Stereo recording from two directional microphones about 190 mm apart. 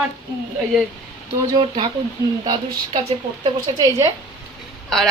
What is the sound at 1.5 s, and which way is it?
A woman's voice, 25° right (ahead or behind).